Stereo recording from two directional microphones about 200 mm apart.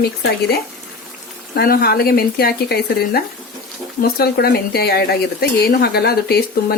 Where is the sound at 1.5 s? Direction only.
50° left (ahead or behind).